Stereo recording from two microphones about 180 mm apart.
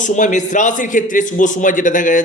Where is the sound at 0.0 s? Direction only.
45° left (ahead or behind).